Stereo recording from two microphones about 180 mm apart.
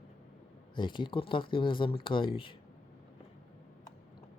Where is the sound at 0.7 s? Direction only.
25° left (ahead or behind).